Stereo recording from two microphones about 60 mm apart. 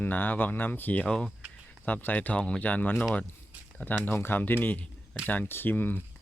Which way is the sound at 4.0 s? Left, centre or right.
Left.